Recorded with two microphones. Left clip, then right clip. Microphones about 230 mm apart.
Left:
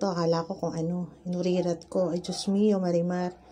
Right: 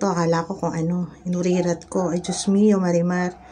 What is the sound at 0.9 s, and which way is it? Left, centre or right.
Speech, centre.